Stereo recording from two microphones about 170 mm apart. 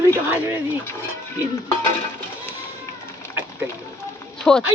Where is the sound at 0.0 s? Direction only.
15° right (ahead or behind).